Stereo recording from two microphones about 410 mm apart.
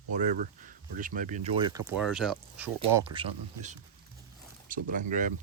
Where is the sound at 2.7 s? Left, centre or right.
Centre.